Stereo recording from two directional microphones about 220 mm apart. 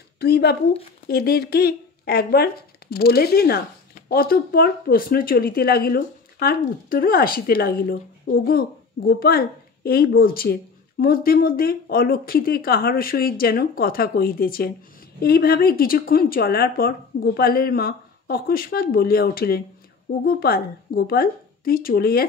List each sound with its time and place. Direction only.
0.2 s speech: 45° left (ahead or behind)